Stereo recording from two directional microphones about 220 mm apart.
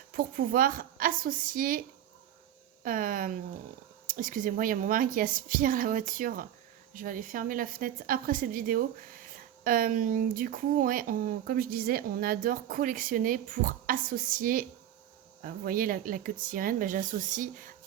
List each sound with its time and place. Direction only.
0.1 s speech: 40° right (ahead or behind)
2.8 s speech: 40° right (ahead or behind)